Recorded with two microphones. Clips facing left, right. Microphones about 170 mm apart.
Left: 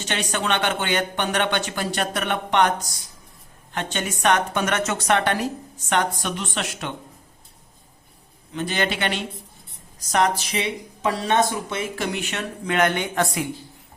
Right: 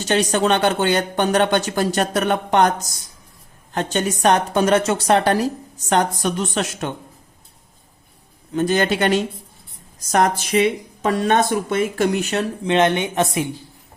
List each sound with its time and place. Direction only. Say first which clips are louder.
0.0 s a woman's voice: right 8 dB; 40° right (ahead or behind)
8.5 s speech: right 7 dB; 45° right (ahead or behind)
12.6 s speech: right 3 dB; 25° right (ahead or behind)